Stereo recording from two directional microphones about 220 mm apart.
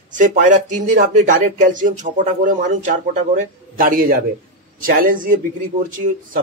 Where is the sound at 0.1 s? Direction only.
35° right (ahead or behind).